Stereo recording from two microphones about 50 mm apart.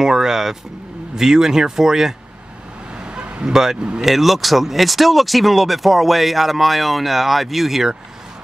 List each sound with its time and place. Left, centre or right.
0.0 s speech: centre
3.0 s vehicle: centre
3.4 s speech: centre